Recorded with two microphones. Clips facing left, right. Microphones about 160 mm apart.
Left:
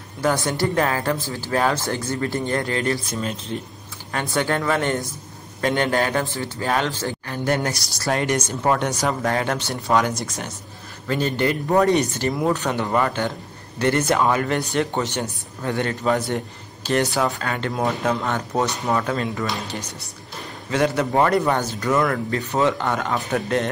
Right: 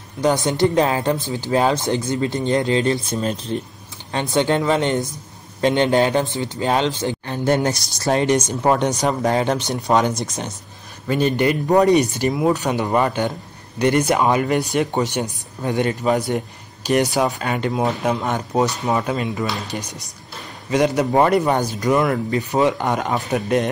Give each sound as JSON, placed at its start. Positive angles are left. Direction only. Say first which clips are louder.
{"t": 0.2, "sound": "speech", "louder": "right 4 dB", "side_deg": -20}
{"t": 3.5, "sound": "speech", "louder": "right 4 dB", "side_deg": -35}
{"t": 4.1, "sound": "speech", "louder": "right 4 dB", "side_deg": -25}